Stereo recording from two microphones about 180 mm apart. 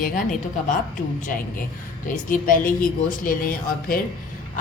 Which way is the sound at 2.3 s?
50° left (ahead or behind).